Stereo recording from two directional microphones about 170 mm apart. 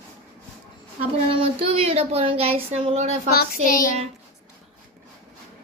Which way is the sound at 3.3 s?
60° left (ahead or behind).